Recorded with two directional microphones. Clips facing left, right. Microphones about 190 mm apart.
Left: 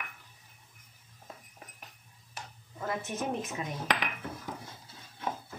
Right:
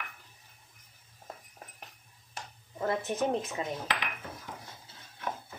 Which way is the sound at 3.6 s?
25° right (ahead or behind).